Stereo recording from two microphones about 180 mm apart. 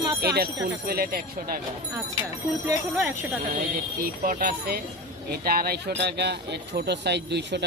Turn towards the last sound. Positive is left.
turn(degrees=-70)  # may be behind; listen again after turning